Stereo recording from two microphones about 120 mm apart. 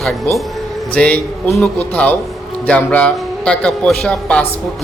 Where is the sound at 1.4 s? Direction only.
Centre (ahead or behind).